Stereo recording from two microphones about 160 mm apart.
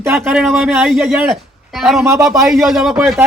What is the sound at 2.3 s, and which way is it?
Speech, centre (ahead or behind).